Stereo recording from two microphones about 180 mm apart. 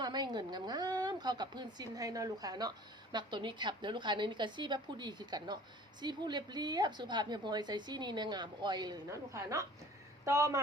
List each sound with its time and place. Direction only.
0.0 s a woman's voice: 25° right (ahead or behind)